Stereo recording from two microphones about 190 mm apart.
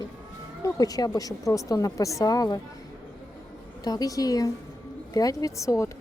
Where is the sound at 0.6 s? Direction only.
20° left (ahead or behind).